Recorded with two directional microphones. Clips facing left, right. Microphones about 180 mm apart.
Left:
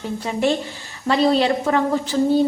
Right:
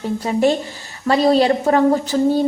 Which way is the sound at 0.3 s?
40° right (ahead or behind).